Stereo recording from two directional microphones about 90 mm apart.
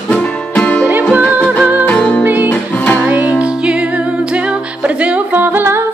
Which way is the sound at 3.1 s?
15° right (ahead or behind).